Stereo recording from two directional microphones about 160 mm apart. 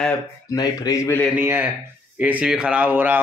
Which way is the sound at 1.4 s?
15° right (ahead or behind).